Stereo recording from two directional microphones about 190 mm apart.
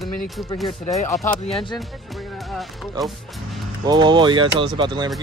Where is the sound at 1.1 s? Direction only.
15° left (ahead or behind).